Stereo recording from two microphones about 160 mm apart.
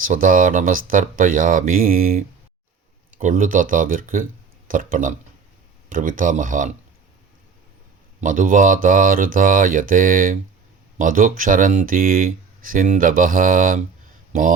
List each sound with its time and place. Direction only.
0.0 s speech: 60° right (ahead or behind)
8.2 s speech: 55° right (ahead or behind)